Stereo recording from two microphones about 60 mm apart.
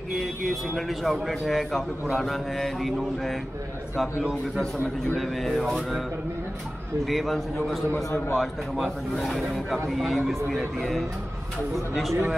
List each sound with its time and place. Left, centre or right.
0.7 s speech: centre
5.2 s speech: centre
7.1 s speech: centre